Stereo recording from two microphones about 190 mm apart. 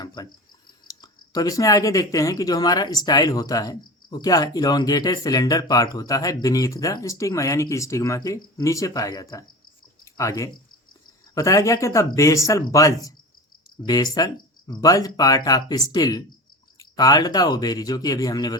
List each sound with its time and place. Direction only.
0.0 s speech: 20° left (ahead or behind)